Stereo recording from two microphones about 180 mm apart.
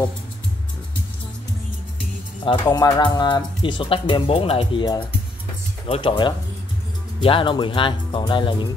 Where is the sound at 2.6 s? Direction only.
25° left (ahead or behind).